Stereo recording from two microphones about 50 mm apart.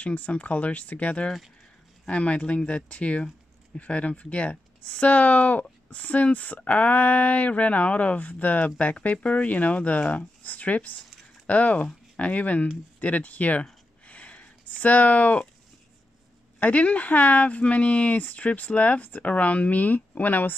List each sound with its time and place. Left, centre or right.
0.0 s speech: left
14.0 s a sound: left
14.8 s speech: left
16.5 s speech: left